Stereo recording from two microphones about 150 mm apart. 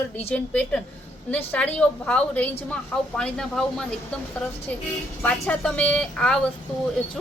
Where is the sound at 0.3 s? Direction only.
10° left (ahead or behind).